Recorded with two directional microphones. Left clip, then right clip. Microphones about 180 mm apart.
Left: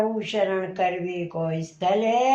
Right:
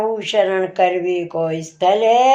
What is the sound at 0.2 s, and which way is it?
Speech, 40° right (ahead or behind).